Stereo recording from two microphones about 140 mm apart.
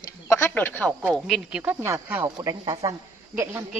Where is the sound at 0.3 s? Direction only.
15° left (ahead or behind).